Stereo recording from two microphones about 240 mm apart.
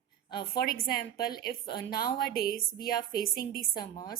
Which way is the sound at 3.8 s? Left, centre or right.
Centre.